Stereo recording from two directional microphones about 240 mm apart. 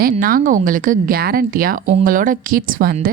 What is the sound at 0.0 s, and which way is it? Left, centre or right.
A woman's voice, right.